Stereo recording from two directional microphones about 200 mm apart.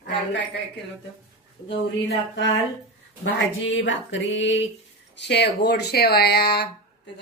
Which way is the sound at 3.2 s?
65° left (ahead or behind).